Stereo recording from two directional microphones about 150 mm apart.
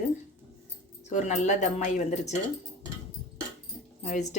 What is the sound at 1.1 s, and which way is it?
Speech, 55° left (ahead or behind).